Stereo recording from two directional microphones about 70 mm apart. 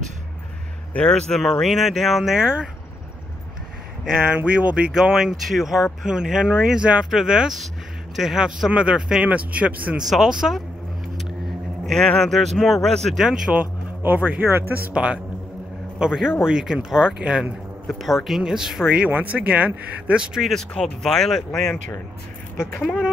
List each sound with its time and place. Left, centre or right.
0.9 s speech: centre
4.0 s speech: centre
9.9 s speech: centre
11.1 s car: centre
12.2 s speech: centre
13.2 s speech: centre
13.6 s speech: right
16.0 s speech: centre
17.8 s speech: centre
19.0 s speech: right
20.3 s speech: centre
22.7 s speech: left